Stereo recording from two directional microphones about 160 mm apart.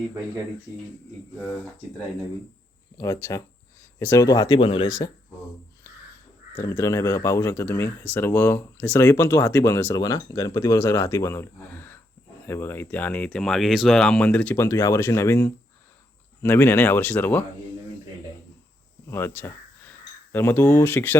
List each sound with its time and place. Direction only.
3.0 s speech: 15° left (ahead or behind)
4.9 s speech: 20° left (ahead or behind)
6.6 s speech: 15° left (ahead or behind)
19.1 s a sound: 10° left (ahead or behind)
20.3 s speech: 15° left (ahead or behind)